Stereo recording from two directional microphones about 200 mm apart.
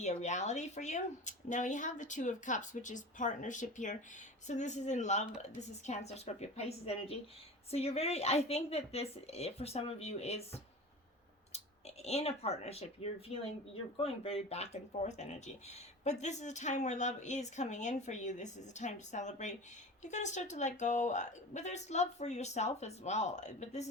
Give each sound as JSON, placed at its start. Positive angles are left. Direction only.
{"t": 0.0, "sound": "speech", "side_deg": 35}